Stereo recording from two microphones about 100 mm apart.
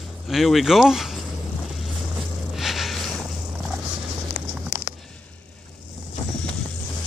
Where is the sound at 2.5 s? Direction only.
Centre (ahead or behind).